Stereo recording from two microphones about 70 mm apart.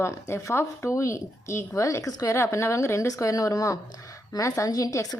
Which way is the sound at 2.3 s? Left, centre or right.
Left.